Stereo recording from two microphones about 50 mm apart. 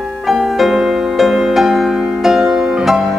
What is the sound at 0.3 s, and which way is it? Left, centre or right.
Music, centre.